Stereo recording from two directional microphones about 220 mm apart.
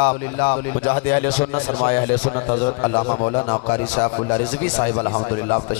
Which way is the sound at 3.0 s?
25° left (ahead or behind).